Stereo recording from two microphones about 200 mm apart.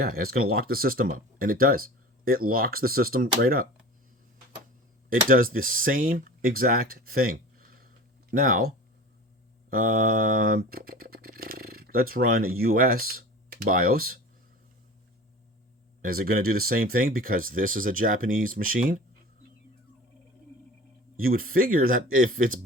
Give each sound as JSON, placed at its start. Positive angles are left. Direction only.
{"t": 0.0, "sound": "speech", "side_deg": -50}
{"t": 5.0, "sound": "speech", "side_deg": -45}
{"t": 16.0, "sound": "speech", "side_deg": -45}
{"t": 21.4, "sound": "speech", "side_deg": -45}